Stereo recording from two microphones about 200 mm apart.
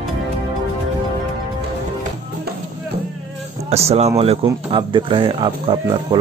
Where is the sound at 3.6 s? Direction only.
30° right (ahead or behind).